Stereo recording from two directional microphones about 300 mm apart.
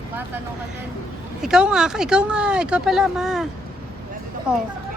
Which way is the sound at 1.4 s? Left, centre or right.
Centre.